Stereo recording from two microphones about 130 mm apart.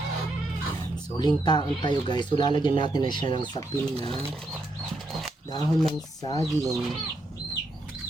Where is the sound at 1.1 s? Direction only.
35° left (ahead or behind).